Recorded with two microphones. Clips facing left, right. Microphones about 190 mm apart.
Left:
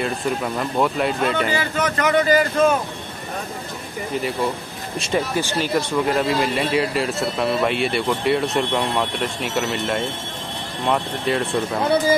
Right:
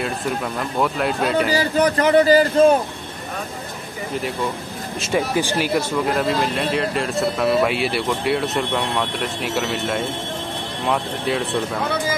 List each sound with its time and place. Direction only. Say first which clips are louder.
0.0 s speech: left 1 dB; 5° left (ahead or behind)
1.5 s a man's voice: right 4 dB; 35° right (ahead or behind)
5.0 s speech: right 2 dB; 10° right (ahead or behind)